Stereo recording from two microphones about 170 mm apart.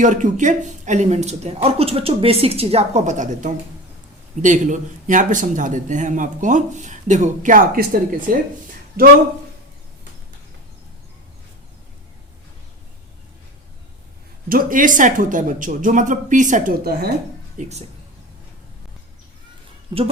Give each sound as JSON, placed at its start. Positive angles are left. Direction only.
{"t": 0.0, "sound": "speech", "side_deg": -45}
{"t": 14.5, "sound": "speech", "side_deg": -50}
{"t": 17.6, "sound": "speech", "side_deg": -40}
{"t": 19.9, "sound": "speech", "side_deg": -25}